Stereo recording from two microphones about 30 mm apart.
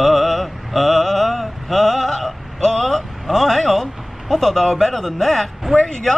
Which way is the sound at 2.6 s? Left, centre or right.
Centre.